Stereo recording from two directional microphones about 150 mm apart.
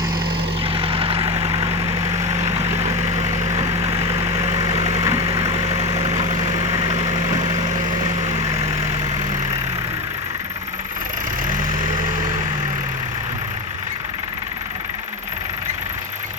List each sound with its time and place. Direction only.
0.7 s vehicle: 40° right (ahead or behind)
4.4 s vehicle: 25° right (ahead or behind)